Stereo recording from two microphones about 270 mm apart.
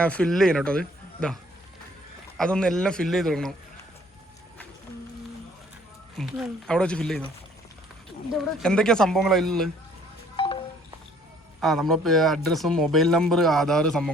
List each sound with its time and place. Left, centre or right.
0.0 s a man's voice: centre
2.4 s a man's voice: centre
6.1 s a man's voice: centre
8.4 s a man's voice: centre
10.3 s wind chime: centre
11.6 s a man's voice: centre